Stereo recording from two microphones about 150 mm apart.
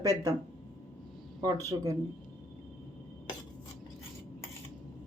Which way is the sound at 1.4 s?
25° right (ahead or behind).